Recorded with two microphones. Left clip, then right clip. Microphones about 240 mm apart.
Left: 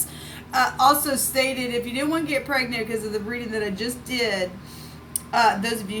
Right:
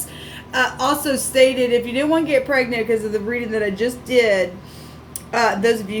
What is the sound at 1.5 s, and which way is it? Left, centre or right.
A woman's voice, left.